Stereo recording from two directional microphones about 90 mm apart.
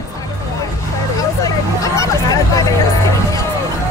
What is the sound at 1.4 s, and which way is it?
Vehicle, 40° left (ahead or behind).